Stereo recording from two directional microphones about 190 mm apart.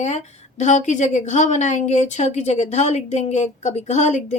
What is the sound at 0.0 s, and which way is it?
A woman's voice, 35° left (ahead or behind).